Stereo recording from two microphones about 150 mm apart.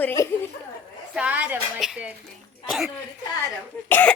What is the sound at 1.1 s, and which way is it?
A woman's voice, 10° right (ahead or behind).